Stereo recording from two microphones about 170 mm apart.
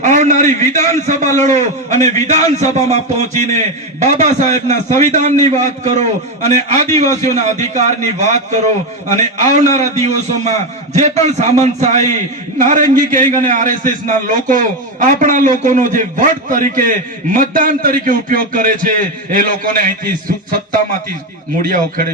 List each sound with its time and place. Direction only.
0.0 s a man's voice: 45° right (ahead or behind)
21.6 s a man's voice: 55° right (ahead or behind)